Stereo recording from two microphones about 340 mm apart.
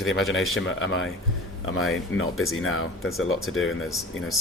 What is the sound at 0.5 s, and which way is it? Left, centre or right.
Speech, left.